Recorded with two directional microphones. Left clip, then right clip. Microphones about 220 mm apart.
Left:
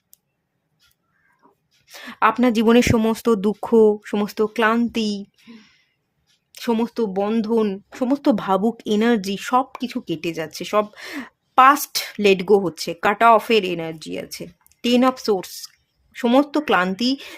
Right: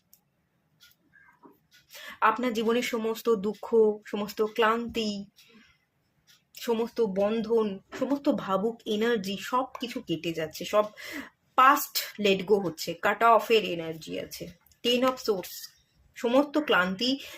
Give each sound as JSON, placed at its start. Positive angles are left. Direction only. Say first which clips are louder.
{"t": 1.9, "sound": "speech", "louder": "left 6 dB", "side_deg": 50}
{"t": 6.5, "sound": "speech", "louder": "left 6 dB", "side_deg": 50}